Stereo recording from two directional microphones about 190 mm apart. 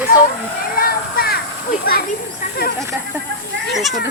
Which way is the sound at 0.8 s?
50° left (ahead or behind).